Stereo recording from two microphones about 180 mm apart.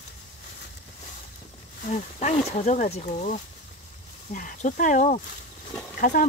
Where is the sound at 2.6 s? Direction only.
45° left (ahead or behind).